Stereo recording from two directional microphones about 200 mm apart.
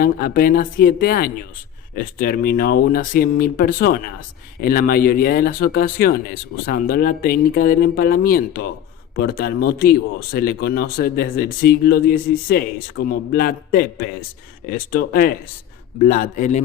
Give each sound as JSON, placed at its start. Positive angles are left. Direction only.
{"t": 0.0, "sound": "a man's voice", "side_deg": 50}